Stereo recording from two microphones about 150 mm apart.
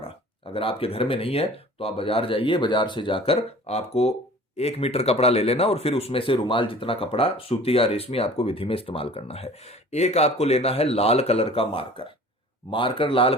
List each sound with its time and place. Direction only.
0.0 s speech: 35° left (ahead or behind)